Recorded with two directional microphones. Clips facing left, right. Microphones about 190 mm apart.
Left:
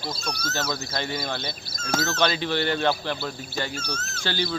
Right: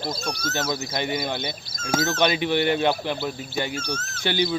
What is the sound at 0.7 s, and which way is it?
Speech, 15° right (ahead or behind).